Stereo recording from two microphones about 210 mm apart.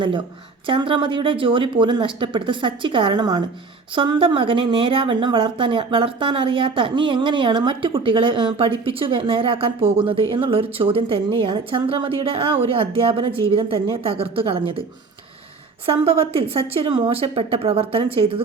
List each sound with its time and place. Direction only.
0.7 s a woman's voice: 25° right (ahead or behind)
15.9 s a woman's voice: 25° right (ahead or behind)